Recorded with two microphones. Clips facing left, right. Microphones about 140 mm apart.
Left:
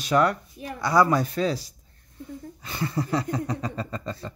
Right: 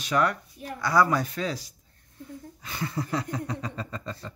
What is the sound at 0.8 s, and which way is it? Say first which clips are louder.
Speech: left 2 dB; 25° left (ahead or behind).